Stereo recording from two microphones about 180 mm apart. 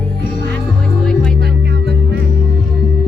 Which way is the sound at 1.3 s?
65° right (ahead or behind).